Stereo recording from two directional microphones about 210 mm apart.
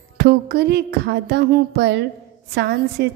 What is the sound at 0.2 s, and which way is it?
A woman's voice, 50° right (ahead or behind).